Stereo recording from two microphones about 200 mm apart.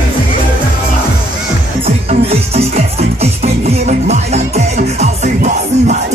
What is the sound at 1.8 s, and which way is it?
Music, 30° right (ahead or behind).